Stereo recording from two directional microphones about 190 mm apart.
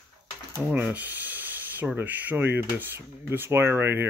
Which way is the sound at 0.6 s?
5° right (ahead or behind).